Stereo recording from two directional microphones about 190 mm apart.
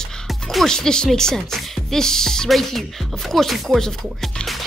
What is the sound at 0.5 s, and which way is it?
Speech, centre (ahead or behind).